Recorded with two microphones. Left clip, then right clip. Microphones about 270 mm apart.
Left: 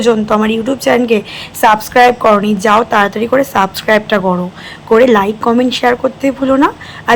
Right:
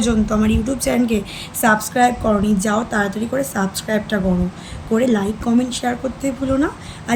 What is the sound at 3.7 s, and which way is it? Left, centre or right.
A woman's voice, centre.